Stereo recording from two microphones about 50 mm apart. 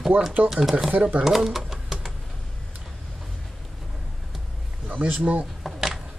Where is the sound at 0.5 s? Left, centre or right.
Centre.